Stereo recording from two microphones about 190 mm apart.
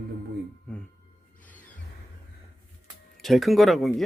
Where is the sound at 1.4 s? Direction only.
10° left (ahead or behind).